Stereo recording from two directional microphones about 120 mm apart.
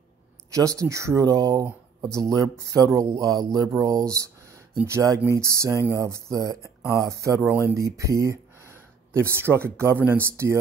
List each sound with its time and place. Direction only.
0.5 s speech: 25° right (ahead or behind)